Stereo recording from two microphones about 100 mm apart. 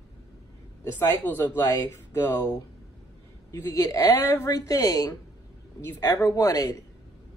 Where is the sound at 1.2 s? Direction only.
20° left (ahead or behind); by 2.6 s 35° left (ahead or behind).